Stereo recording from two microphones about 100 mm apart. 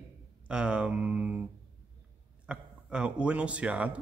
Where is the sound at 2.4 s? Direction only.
10° right (ahead or behind).